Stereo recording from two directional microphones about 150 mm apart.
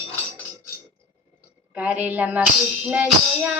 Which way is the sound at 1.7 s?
10° right (ahead or behind).